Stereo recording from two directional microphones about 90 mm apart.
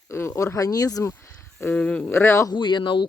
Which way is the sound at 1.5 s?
15° left (ahead or behind).